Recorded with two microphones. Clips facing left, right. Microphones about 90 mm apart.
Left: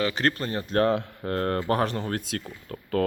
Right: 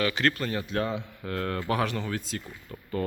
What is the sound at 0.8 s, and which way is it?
Speech, 55° left (ahead or behind).